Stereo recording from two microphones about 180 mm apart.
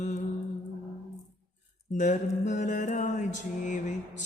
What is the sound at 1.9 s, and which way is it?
A man's voice, 40° left (ahead or behind).